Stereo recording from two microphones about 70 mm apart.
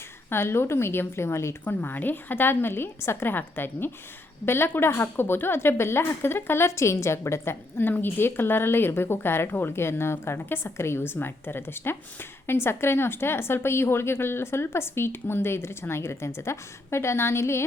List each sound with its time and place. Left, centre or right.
0.3 s speech: left
1.6 s speech: left